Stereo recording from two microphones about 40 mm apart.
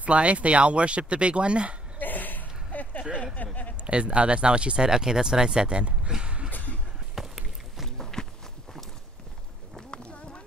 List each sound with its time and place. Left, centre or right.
0.0 s speech: right
2.0 s a sound: left
3.7 s speech: right
7.2 s a sound: centre
8.0 s walk: centre
9.8 s clip-clop: left